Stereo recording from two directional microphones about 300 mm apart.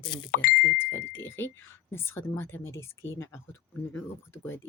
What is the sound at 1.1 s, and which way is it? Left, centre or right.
Speech, centre.